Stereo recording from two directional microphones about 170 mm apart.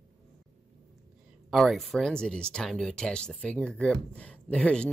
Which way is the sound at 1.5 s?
Centre (ahead or behind).